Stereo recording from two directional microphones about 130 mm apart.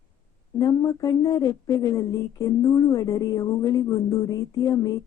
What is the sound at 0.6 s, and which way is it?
Speech, 30° left (ahead or behind).